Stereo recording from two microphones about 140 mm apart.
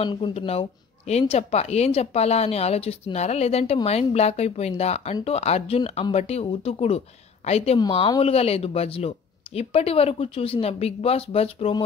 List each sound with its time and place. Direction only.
0.0 s speech: 35° left (ahead or behind)